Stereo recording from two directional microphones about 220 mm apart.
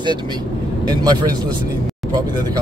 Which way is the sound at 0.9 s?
20° right (ahead or behind).